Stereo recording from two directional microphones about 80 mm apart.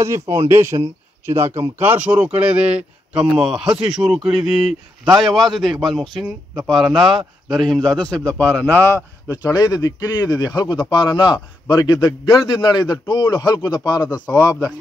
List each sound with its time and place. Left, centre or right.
0.0 s a man's voice: right; by 9.0 s left
9.3 s speech: left
12.4 s speech: left
14.3 s a man's voice: left